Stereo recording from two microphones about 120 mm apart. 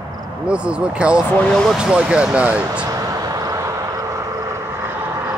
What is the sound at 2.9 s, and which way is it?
Vehicle, 30° right (ahead or behind).